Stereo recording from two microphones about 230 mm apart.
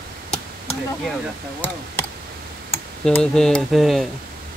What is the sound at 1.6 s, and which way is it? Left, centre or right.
Speech, centre.